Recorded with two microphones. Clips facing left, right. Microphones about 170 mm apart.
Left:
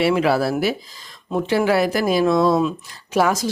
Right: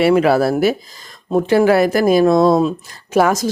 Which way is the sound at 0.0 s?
50° right (ahead or behind).